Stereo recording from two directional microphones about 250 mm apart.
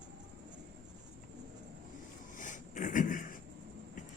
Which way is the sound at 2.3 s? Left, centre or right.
Left.